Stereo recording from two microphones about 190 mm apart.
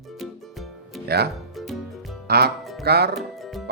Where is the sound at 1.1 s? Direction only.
60° right (ahead or behind).